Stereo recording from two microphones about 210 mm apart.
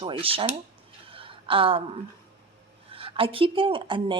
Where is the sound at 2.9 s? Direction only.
25° right (ahead or behind).